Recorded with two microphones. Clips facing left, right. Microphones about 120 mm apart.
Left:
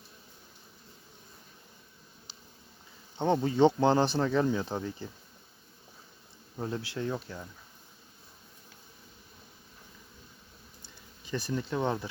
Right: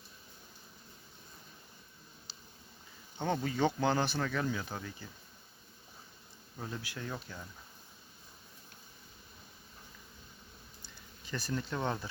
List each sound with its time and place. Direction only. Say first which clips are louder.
2.3 s a sound: left 3 dB; 20° left (ahead or behind)
3.2 s speech: left 8 dB; 20° left (ahead or behind)
6.6 s speech: left 8 dB; 25° left (ahead or behind)
11.3 s speech: left 4 dB; 20° left (ahead or behind)